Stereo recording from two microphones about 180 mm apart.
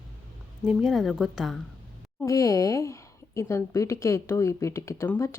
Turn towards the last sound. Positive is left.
turn(degrees=15)  # may be behind; listen again after turning